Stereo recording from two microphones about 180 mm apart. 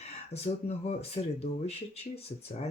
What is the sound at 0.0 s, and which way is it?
Speech, 35° left (ahead or behind).